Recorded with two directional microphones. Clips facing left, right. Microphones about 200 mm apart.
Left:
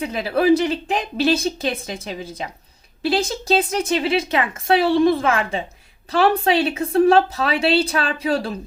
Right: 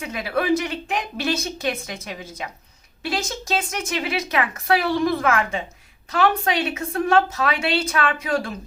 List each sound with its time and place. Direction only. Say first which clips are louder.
0.0 s a woman's voice: left 5 dB; 30° left (ahead or behind)